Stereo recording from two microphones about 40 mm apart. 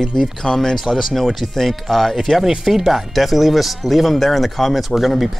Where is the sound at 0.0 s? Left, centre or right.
Centre.